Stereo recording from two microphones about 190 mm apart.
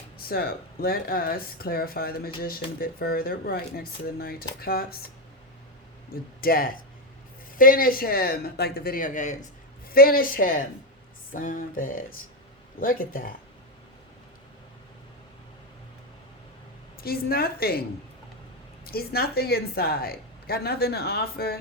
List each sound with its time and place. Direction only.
0.2 s a woman's voice: 50° left (ahead or behind)
6.4 s a woman's voice: 50° left (ahead or behind)
17.0 s a woman's voice: 55° left (ahead or behind)
18.9 s a woman's voice: 55° left (ahead or behind)